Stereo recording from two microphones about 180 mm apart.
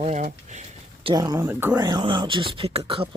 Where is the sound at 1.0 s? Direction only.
20° right (ahead or behind).